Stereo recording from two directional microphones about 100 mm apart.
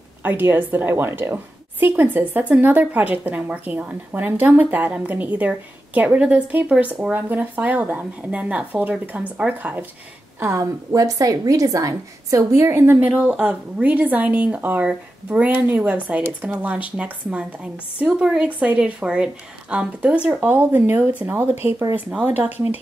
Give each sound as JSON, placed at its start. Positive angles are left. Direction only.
{"t": 0.2, "sound": "a woman's voice", "side_deg": -20}
{"t": 10.4, "sound": "a woman's voice", "side_deg": -30}